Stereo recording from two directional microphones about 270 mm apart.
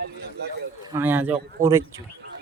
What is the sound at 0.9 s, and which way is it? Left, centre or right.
Speech, centre.